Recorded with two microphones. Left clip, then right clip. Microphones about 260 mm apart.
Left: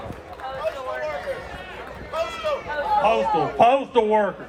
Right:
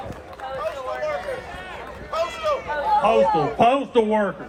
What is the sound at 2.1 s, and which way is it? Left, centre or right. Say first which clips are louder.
Run: right 2 dB; right.